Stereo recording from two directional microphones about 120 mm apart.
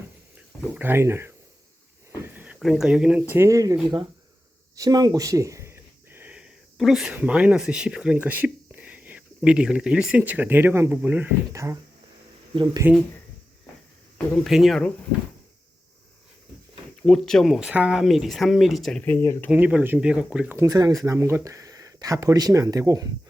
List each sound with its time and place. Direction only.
0.3 s speech: 15° right (ahead or behind)
2.2 s a sound: 15° right (ahead or behind)
2.6 s speech: centre (ahead or behind)
3.3 s speech: 25° right (ahead or behind)
11.5 s speech: 25° right (ahead or behind)
12.8 s speech: 15° right (ahead or behind)
14.3 s speech: centre (ahead or behind)
17.0 s speech: 5° left (ahead or behind)
19.2 s speech: 20° left (ahead or behind)
19.5 s speech: 10° right (ahead or behind)
20.6 s speech: 30° right (ahead or behind)